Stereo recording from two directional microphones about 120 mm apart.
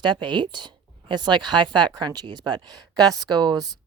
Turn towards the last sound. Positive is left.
turn(degrees=-35)  # may be behind; listen again after turning